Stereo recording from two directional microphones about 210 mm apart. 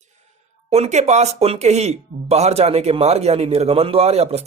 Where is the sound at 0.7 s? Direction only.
30° right (ahead or behind).